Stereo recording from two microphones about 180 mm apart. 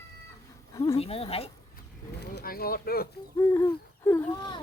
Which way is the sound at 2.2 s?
60° left (ahead or behind).